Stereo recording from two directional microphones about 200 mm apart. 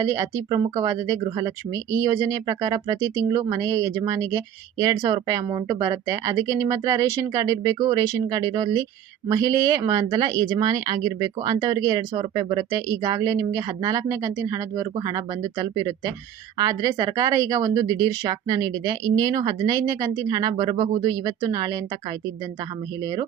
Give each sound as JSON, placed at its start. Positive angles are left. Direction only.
{"t": 0.0, "sound": "speech", "side_deg": -15}